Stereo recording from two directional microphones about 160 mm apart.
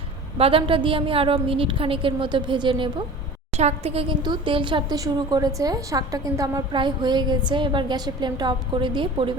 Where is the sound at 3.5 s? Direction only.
40° right (ahead or behind).